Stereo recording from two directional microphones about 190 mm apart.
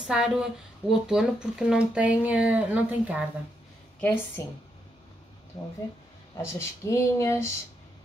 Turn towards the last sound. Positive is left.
turn(degrees=15)  # may be behind; listen again after turning